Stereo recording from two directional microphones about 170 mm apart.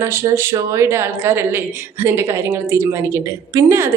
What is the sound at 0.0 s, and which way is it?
A woman's voice, 15° right (ahead or behind).